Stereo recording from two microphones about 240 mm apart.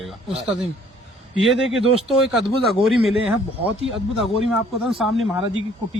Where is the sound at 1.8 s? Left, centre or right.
Right.